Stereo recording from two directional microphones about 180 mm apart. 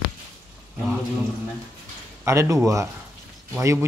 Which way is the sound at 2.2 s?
15° right (ahead or behind).